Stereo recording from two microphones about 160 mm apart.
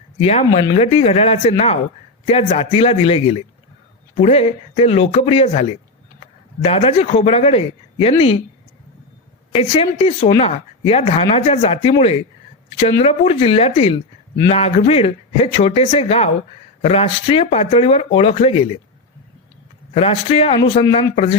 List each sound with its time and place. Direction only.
0.2 s speech: 40° left (ahead or behind)
9.5 s speech: 40° left (ahead or behind)
19.9 s speech: 40° left (ahead or behind)